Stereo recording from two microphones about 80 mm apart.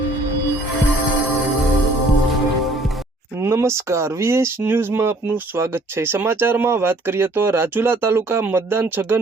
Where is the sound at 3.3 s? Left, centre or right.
Right.